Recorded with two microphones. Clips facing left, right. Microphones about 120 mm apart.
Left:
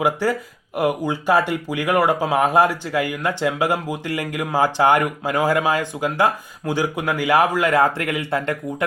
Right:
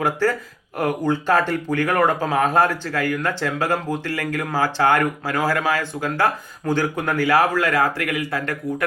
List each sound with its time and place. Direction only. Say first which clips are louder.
0.0 s speech: left 1 dB; 15° left (ahead or behind)